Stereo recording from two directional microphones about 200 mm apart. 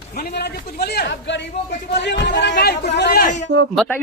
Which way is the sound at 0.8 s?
55° left (ahead or behind).